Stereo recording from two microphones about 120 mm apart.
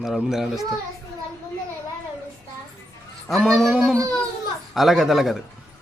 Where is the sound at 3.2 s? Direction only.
Centre (ahead or behind).